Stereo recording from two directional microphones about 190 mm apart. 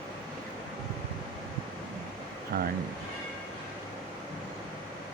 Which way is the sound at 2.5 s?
45° right (ahead or behind).